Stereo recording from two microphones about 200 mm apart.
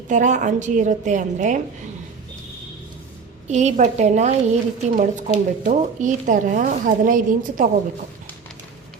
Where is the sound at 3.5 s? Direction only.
35° right (ahead or behind).